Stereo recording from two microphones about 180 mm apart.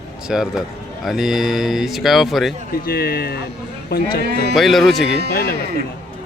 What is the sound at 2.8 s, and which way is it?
Speech, 55° left (ahead or behind).